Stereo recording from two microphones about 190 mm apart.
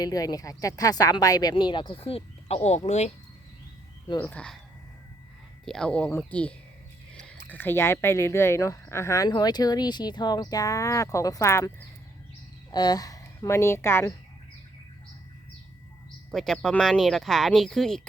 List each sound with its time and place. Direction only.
0.0 s speech: 20° left (ahead or behind); by 3.1 s 35° left (ahead or behind)
4.1 s speech: 10° left (ahead or behind)
5.6 s a woman's voice: 5° left (ahead or behind)
16.3 s speech: centre (ahead or behind)